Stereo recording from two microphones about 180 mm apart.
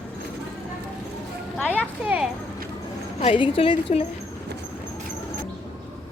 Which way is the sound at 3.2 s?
30° left (ahead or behind).